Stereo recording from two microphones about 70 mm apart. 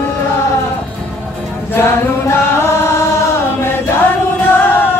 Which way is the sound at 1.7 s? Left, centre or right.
Left.